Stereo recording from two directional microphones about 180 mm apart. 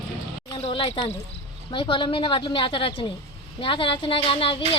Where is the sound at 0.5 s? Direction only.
25° left (ahead or behind).